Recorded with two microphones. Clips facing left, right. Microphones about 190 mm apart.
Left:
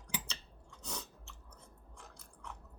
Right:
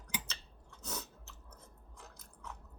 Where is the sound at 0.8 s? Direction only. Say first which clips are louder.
Right 1 dB; 5° right (ahead or behind).